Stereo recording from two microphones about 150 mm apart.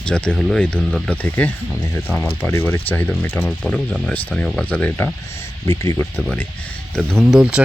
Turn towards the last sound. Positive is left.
turn(degrees=-5)  # may be behind; listen again after turning